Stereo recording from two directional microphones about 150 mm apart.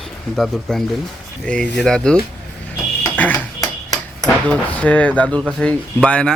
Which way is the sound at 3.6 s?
20° left (ahead or behind).